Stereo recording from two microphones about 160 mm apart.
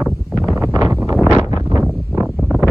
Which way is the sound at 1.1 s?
10° right (ahead or behind).